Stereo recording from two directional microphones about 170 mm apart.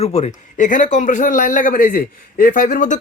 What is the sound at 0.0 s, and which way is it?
A man's voice, 40° left (ahead or behind).